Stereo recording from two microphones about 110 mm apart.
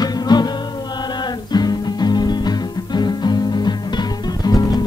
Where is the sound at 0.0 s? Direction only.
40° left (ahead or behind).